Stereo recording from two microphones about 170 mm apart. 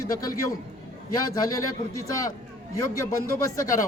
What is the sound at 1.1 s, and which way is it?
Speech, 20° left (ahead or behind).